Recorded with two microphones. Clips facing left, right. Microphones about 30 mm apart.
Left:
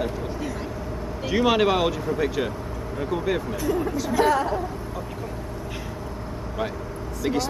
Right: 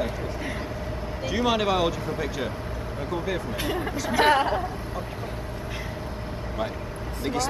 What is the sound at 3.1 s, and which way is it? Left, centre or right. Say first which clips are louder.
Speech: left 4 dB; centre.